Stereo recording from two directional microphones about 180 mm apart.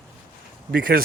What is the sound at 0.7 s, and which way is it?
Speech, 55° right (ahead or behind).